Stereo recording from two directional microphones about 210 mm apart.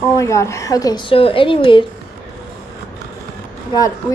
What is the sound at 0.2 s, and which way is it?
Speech, 15° left (ahead or behind).